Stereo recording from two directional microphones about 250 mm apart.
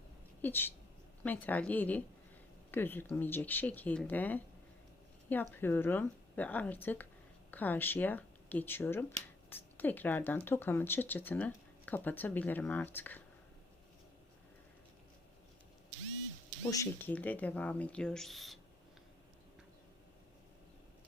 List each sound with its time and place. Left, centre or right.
0.4 s speech: centre
16.6 s speech: centre